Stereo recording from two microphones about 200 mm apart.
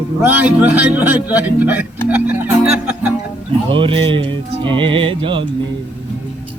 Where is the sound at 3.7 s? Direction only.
25° right (ahead or behind).